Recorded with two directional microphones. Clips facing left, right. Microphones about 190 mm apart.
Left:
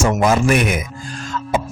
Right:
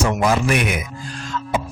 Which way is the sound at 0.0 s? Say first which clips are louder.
Left 3 dB; 45° left (ahead or behind).